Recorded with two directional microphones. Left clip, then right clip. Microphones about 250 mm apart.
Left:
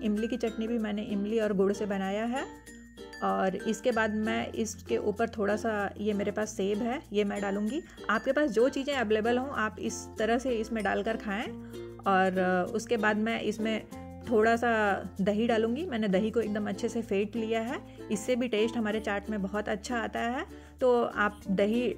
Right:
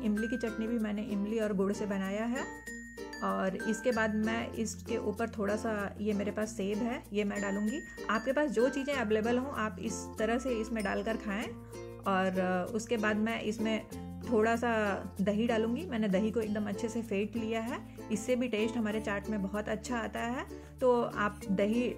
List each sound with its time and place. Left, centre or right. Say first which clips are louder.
0.0 s speech: left 3 dB; left